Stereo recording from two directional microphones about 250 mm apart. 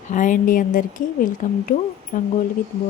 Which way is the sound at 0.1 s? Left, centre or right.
Left.